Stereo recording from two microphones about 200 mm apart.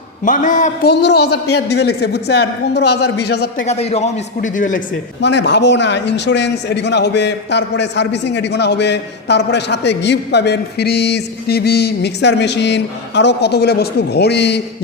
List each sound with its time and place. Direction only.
0.3 s a man's voice: 40° left (ahead or behind)
0.9 s a man's voice: 55° left (ahead or behind)
3.7 s a man's voice: 30° left (ahead or behind)
5.2 s a man's voice: 60° left (ahead or behind)